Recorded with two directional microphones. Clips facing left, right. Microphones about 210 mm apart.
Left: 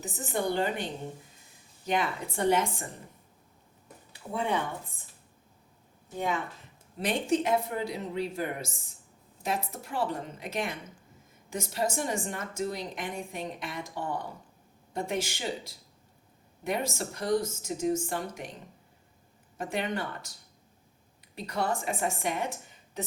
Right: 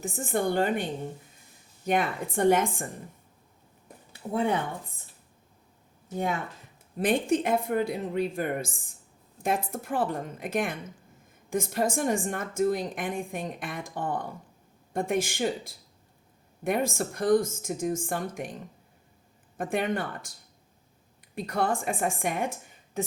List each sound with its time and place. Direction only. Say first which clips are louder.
0.0 s a woman's voice: right 3 dB; 50° right (ahead or behind)
1.9 s a woman's voice: right 3 dB; 50° right (ahead or behind)
4.3 s a woman's voice: right 5 dB; 40° right (ahead or behind)
7.0 s a woman's voice: right 3 dB; 55° right (ahead or behind)
19.5 s a woman's voice: right 4 dB; 50° right (ahead or behind)
21.3 s a woman's voice: right 3 dB; 50° right (ahead or behind)